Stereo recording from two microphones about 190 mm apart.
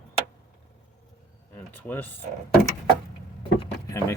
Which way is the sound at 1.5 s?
10° left (ahead or behind).